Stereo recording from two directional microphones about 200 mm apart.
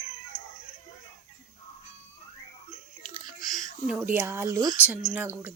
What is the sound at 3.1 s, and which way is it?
Chewing, 20° right (ahead or behind).